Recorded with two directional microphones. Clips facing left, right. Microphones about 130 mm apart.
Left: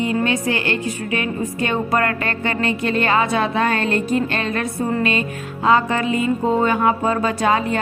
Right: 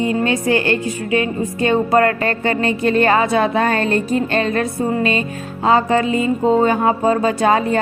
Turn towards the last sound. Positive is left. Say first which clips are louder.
# right 3 dB
turn(degrees=-35)  # may be behind; listen again after turning